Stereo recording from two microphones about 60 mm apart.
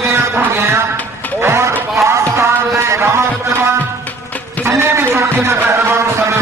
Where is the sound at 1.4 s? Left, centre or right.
Right.